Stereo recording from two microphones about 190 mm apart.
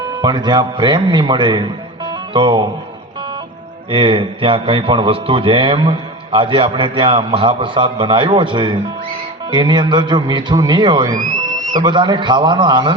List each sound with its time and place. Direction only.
0.2 s a man's voice: 25° right (ahead or behind)
3.9 s a man's voice: 30° right (ahead or behind)